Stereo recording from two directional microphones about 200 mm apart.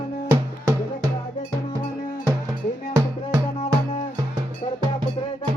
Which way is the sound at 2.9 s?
20° right (ahead or behind).